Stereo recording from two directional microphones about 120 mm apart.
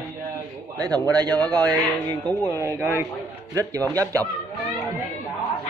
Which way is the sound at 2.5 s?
20° right (ahead or behind).